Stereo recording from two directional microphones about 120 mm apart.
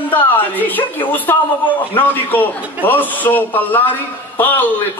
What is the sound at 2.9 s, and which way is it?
A woman's voice, 15° left (ahead or behind).